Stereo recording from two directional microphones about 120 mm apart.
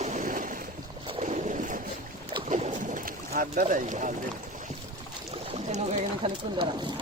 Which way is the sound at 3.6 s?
90° right.